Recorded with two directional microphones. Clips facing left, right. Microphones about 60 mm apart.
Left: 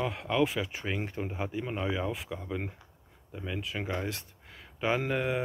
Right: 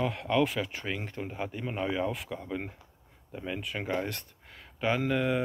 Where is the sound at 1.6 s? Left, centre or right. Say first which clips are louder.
Right 2 dB; centre.